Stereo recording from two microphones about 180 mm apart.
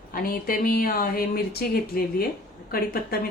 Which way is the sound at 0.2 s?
55° left (ahead or behind).